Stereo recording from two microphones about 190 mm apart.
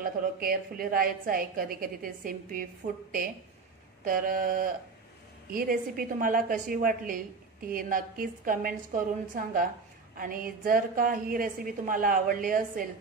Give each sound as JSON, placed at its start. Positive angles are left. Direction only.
{"t": 0.0, "sound": "a woman's voice", "side_deg": -50}